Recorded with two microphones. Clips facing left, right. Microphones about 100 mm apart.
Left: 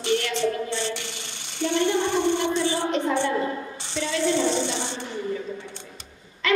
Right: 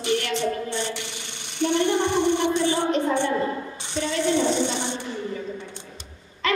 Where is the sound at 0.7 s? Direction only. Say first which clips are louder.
Even; 20° right (ahead or behind).